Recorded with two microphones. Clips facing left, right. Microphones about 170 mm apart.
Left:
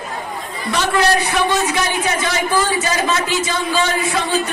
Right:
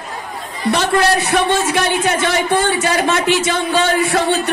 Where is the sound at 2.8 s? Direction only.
65° right (ahead or behind).